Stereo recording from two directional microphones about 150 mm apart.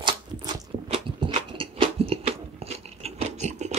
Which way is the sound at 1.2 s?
35° right (ahead or behind).